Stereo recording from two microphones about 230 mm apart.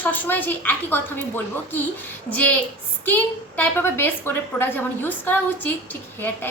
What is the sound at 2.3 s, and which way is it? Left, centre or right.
A woman's voice, centre.